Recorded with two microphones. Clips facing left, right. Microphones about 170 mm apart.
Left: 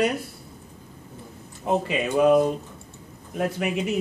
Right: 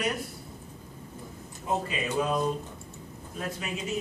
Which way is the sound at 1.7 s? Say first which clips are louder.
Left 6 dB; 65° left (ahead or behind).